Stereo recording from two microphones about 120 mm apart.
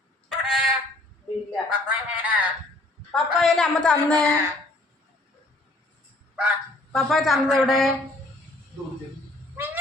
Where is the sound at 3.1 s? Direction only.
Centre (ahead or behind).